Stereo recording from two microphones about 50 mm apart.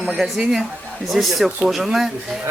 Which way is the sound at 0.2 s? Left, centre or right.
Centre.